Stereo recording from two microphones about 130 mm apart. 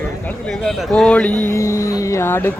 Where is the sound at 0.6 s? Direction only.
5° left (ahead or behind).